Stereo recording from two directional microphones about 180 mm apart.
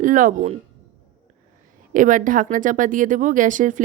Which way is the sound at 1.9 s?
45° right (ahead or behind).